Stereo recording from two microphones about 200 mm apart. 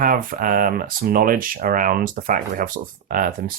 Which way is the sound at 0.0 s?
45° right (ahead or behind).